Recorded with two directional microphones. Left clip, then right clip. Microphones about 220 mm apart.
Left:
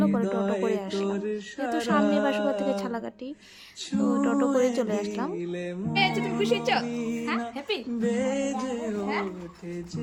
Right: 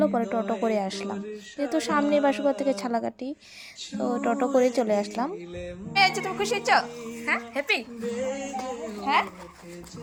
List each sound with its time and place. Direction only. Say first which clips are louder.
0.0 s music: right 2 dB; 10° right (ahead or behind)
0.6 s a woman's voice: right 1 dB; 15° right (ahead or behind)
5.4 s speech: left 4 dB; 40° left (ahead or behind)
5.9 s a woman's voice: right 3 dB; centre (ahead or behind)
8.0 s music: left 3 dB; 45° left (ahead or behind)